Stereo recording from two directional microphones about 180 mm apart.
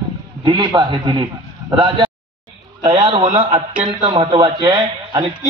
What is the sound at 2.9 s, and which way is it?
Speech, 30° right (ahead or behind).